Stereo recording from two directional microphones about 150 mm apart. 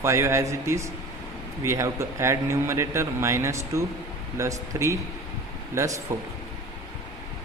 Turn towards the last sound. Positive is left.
turn(degrees=-20)  # may be behind; listen again after turning